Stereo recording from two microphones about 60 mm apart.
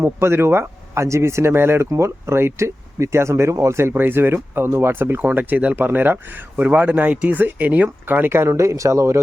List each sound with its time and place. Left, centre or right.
0.0 s speech: right
1.9 s speech: right
3.9 s speech: right